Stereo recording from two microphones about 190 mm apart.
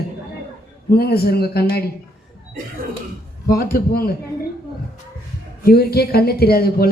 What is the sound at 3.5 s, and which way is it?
Speech, 50° left (ahead or behind).